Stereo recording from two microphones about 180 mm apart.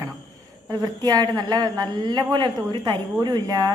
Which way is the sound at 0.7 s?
20° right (ahead or behind).